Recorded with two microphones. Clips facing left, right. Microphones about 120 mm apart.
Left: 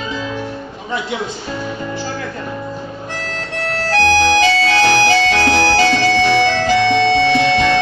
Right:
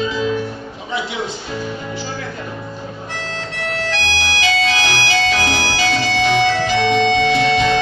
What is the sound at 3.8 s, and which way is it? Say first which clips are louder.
Music: left 11 dB; 40° left (ahead or behind).